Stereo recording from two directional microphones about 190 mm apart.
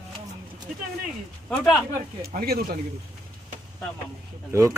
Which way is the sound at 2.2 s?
55° right (ahead or behind).